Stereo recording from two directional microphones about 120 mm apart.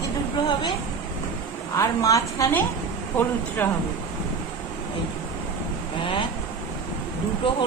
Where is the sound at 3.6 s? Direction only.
15° left (ahead or behind).